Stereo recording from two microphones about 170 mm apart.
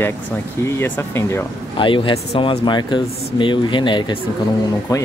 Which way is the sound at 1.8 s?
30° left (ahead or behind).